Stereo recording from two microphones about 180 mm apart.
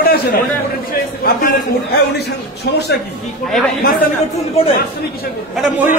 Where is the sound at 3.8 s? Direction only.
50° left (ahead or behind).